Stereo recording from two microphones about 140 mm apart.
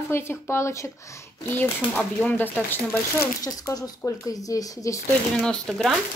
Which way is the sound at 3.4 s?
25° left (ahead or behind).